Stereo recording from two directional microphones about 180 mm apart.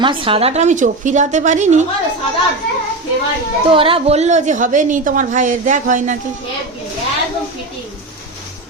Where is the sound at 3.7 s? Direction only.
30° right (ahead or behind).